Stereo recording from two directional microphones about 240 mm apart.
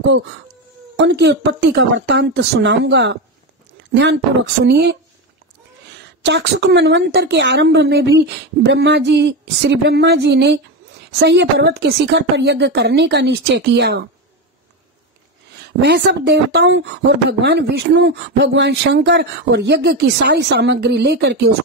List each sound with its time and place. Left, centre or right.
0.9 s a woman's voice: right
6.2 s a woman's voice: right
15.6 s a woman's voice: right